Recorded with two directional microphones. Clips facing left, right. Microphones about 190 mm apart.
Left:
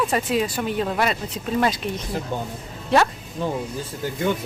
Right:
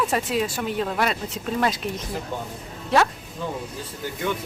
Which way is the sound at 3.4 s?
30° left (ahead or behind).